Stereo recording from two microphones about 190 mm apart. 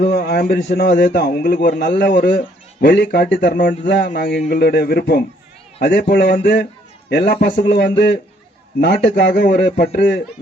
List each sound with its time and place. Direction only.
0.1 s a man's voice: 55° left (ahead or behind)
3.5 s a man's voice: 45° left (ahead or behind)
3.8 s a man's voice: 65° left (ahead or behind)